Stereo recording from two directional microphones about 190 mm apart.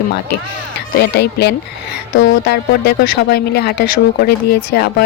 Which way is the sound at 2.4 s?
55° left (ahead or behind).